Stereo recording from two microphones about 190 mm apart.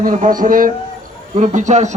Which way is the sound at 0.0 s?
45° right (ahead or behind).